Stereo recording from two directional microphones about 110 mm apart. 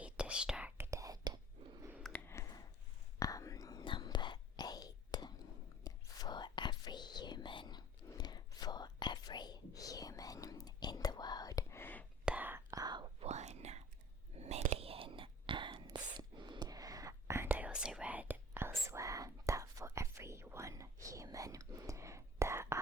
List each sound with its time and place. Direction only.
0.0 s whispering: 10° right (ahead or behind)
0.8 s whispering: 30° right (ahead or behind)
2.2 s a sound: 25° left (ahead or behind)
3.2 s whispering: 30° left (ahead or behind)
3.8 s whispering: 45° left (ahead or behind); by 12.0 s 20° left (ahead or behind)
12.2 s whispering: 15° right (ahead or behind)
12.7 s whispering: 40° right (ahead or behind)
13.1 s whispering: 85° right; by 22.8 s 25° right (ahead or behind)